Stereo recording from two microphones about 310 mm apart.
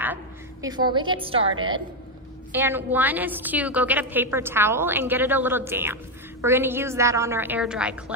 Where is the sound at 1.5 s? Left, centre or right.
Right.